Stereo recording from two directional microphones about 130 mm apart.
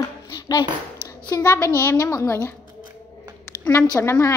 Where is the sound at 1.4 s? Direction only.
15° left (ahead or behind).